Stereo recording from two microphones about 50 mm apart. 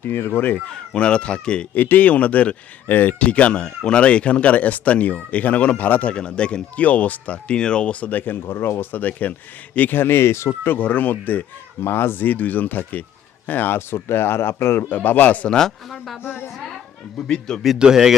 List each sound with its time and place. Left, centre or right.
0.0 s speech: left
0.7 s speech: centre
1.7 s speech: left
2.8 s speech: left
3.2 s speech: left
8.1 s speech: left
9.9 s speech: left
10.8 s speech: left
11.8 s speech: left
12.2 s speech: left
14.9 s speech: left
15.4 s speech: centre
17.2 s speech: centre
17.7 s speech: centre